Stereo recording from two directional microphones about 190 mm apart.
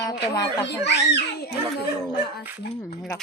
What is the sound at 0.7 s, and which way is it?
Speech, 65° left (ahead or behind).